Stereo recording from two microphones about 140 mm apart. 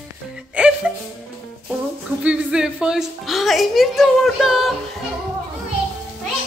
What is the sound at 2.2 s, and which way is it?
A woman's voice, 5° right (ahead or behind).